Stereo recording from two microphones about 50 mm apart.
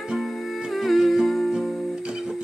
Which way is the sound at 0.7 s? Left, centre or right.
Centre.